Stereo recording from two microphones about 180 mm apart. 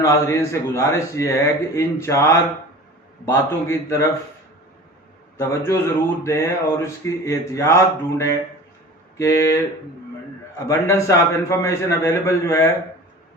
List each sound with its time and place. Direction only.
0.0 s a man's voice: 15° left (ahead or behind)
5.4 s a man's voice: 15° left (ahead or behind)
10.7 s a man's voice: 15° left (ahead or behind)